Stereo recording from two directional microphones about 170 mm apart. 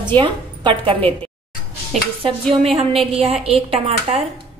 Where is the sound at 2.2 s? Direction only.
30° right (ahead or behind).